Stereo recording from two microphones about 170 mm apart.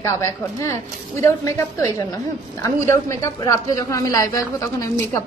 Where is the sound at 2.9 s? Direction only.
15° left (ahead or behind).